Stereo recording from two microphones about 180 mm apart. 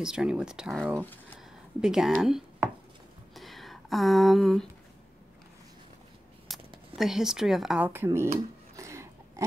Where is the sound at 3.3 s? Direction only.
Centre (ahead or behind).